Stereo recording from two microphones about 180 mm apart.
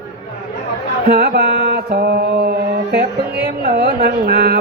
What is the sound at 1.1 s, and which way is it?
Music, 60° right (ahead or behind).